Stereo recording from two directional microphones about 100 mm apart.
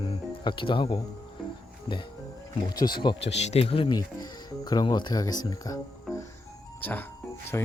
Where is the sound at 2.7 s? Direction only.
40° left (ahead or behind).